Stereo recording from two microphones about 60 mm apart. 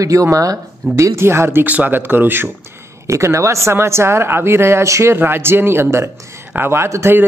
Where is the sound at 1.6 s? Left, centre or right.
Right.